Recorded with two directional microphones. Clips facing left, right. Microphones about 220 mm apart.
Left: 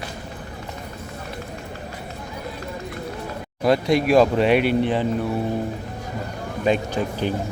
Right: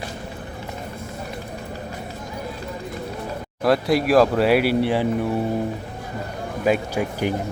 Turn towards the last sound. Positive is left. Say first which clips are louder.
# right 1 dB
turn(degrees=-10)  # may be behind; listen again after turning